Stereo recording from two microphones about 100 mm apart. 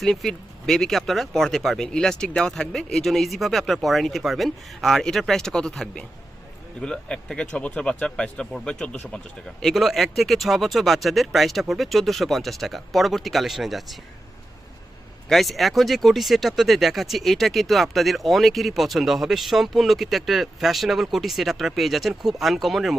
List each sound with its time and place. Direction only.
0.0 s speech: 5° left (ahead or behind)
15.3 s speech: centre (ahead or behind)